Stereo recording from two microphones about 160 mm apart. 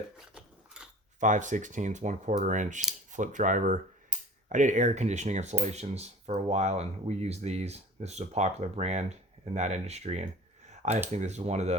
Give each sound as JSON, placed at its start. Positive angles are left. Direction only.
{"t": 0.2, "sound": "dog", "side_deg": -5}
{"t": 1.2, "sound": "speech", "side_deg": -50}
{"t": 10.7, "sound": "computer keyboard", "side_deg": -45}
{"t": 11.1, "sound": "speech", "side_deg": -45}